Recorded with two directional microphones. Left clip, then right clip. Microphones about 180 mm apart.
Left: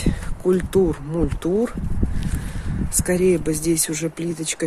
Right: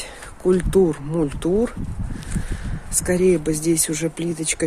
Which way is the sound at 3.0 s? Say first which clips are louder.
Right 1 dB; 10° right (ahead or behind).